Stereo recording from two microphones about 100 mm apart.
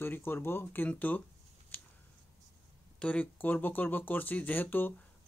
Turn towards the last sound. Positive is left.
turn(degrees=20)  # may be behind; listen again after turning